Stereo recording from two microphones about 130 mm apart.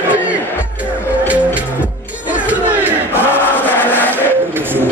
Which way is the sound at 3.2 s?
15° left (ahead or behind).